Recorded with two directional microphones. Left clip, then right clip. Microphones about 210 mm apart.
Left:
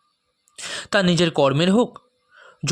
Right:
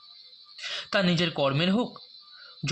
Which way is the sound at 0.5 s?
50° left (ahead or behind).